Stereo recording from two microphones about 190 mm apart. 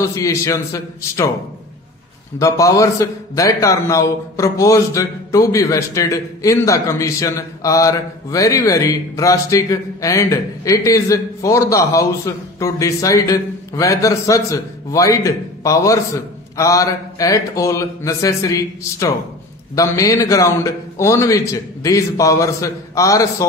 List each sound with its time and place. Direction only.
0.1 s a man's voice: 15° left (ahead or behind)
2.3 s a man's voice: 15° left (ahead or behind)